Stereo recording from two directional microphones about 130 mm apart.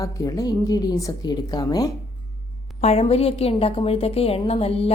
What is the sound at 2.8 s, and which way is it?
A woman's voice, 50° left (ahead or behind).